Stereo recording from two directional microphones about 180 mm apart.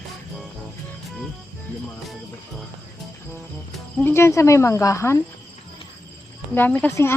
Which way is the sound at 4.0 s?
10° left (ahead or behind).